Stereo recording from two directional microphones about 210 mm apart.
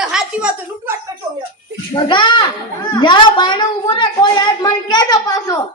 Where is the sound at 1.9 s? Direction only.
20° left (ahead or behind).